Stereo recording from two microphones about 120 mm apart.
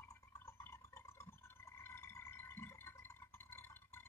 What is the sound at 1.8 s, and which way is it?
Music, 20° left (ahead or behind).